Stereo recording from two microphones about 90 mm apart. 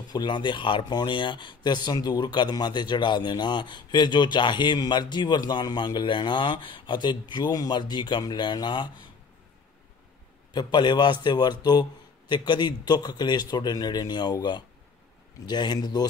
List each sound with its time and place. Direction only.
0.1 s speech: 55° left (ahead or behind)
10.5 s a man's voice: 55° left (ahead or behind)